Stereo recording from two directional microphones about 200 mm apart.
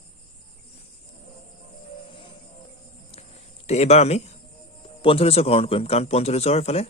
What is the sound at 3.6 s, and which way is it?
A man's voice, 35° left (ahead or behind).